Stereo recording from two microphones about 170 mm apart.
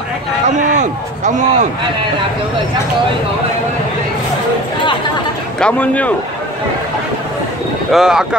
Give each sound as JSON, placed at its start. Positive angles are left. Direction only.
{"t": 0.6, "sound": "speech", "side_deg": -45}
{"t": 5.6, "sound": "speech", "side_deg": 10}
{"t": 7.9, "sound": "speech", "side_deg": -5}